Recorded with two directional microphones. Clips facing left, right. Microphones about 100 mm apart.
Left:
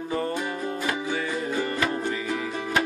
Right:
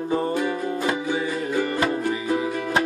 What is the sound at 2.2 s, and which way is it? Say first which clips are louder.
Music: right 5 dB; 20° right (ahead or behind).